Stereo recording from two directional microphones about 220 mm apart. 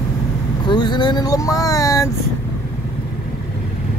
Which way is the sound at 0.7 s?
20° left (ahead or behind).